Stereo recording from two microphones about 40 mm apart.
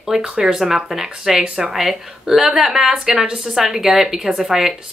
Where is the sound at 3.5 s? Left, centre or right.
Centre.